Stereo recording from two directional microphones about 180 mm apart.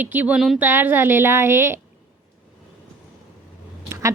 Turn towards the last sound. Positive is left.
turn(degrees=-15)  # may be behind; listen again after turning